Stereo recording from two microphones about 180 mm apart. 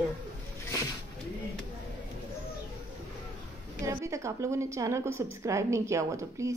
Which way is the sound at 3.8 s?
15° right (ahead or behind).